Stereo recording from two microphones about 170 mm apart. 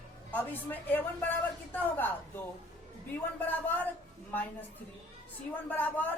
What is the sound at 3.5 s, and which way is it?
Speech, 10° left (ahead or behind).